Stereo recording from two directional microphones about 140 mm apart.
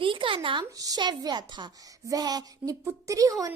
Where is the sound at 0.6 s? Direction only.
25° right (ahead or behind).